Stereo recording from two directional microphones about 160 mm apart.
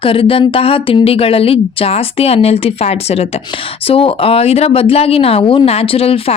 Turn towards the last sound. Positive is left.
turn(degrees=35)  # may be behind; listen again after turning